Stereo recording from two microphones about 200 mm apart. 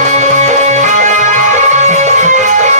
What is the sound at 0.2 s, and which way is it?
Music, 35° right (ahead or behind).